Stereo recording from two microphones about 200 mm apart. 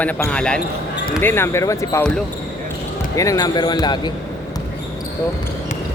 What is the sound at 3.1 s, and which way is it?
Speech, 15° left (ahead or behind).